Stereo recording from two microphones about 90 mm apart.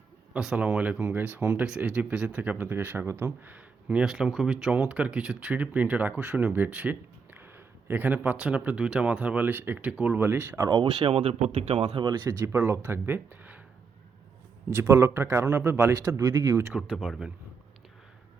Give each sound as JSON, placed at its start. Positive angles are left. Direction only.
{"t": 0.3, "sound": "speech", "side_deg": -10}
{"t": 10.2, "sound": "a man's voice", "side_deg": -25}
{"t": 10.7, "sound": "speech", "side_deg": -50}
{"t": 11.0, "sound": "speech", "side_deg": -90}
{"t": 11.7, "sound": "speech", "side_deg": -65}
{"t": 12.5, "sound": "a man's voice", "side_deg": -30}
{"t": 14.8, "sound": "a man's voice", "side_deg": -30}
{"t": 16.0, "sound": "speech", "side_deg": -45}
{"t": 16.7, "sound": "speech", "side_deg": -5}